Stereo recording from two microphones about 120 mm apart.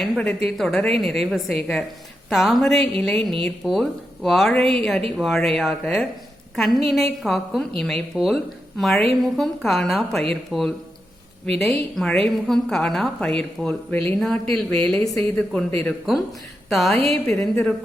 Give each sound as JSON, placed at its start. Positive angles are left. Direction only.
{"t": 0.0, "sound": "a woman's voice", "side_deg": 10}